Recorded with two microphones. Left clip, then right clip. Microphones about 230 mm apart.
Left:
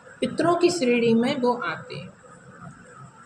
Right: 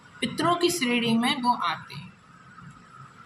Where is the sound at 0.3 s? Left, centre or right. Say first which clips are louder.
Left 3 dB; right.